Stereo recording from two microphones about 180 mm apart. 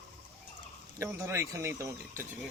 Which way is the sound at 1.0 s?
15° right (ahead or behind).